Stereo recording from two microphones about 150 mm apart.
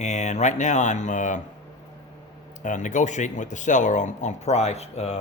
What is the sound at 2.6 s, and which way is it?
Speech, 55° left (ahead or behind).